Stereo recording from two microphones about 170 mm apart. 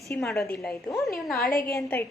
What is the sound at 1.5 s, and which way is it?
Speech, 60° left (ahead or behind).